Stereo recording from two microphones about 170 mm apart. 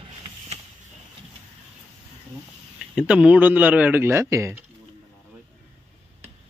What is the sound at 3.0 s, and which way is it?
A man's voice, 5° right (ahead or behind).